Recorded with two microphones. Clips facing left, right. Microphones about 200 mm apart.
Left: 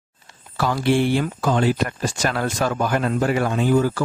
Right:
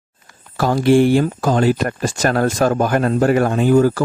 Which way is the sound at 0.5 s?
45° right (ahead or behind).